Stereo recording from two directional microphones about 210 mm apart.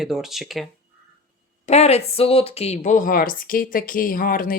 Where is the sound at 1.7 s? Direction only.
30° left (ahead or behind).